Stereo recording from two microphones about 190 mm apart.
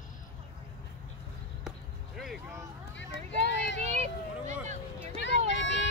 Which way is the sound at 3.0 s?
65° left (ahead or behind).